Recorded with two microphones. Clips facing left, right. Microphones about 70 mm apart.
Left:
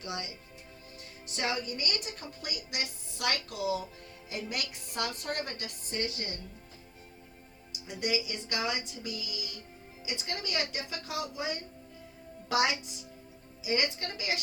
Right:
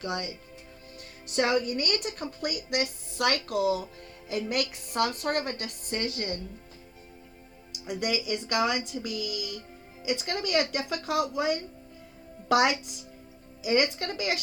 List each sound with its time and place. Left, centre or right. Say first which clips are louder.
0.0 s speech: right 6 dB; right
7.7 s speech: right 3 dB; right